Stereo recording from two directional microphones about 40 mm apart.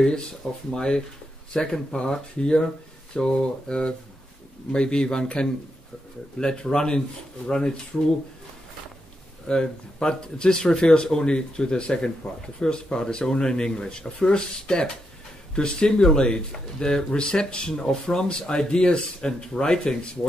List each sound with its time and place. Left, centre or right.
0.7 s speech: left
9.5 s speech: left